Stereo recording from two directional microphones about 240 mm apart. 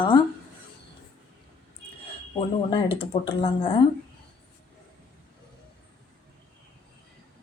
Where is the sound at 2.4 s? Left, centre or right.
Left.